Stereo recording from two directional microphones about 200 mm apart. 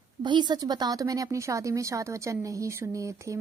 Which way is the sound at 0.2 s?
20° right (ahead or behind).